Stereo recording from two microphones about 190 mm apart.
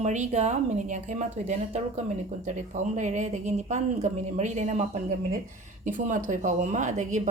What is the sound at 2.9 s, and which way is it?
A woman's voice, 40° right (ahead or behind).